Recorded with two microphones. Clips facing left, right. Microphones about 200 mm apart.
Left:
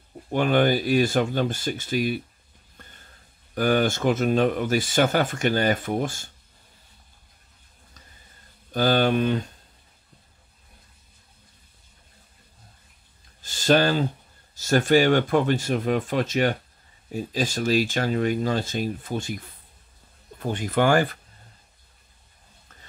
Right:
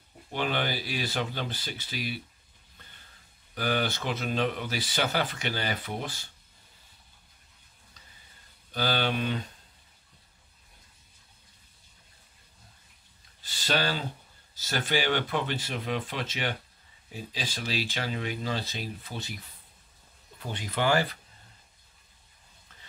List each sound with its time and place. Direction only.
0.3 s speech: 50° left (ahead or behind)
2.8 s a sound: 50° left (ahead or behind)
3.5 s speech: 50° left (ahead or behind)
8.7 s speech: 45° left (ahead or behind)
13.4 s speech: 45° left (ahead or behind)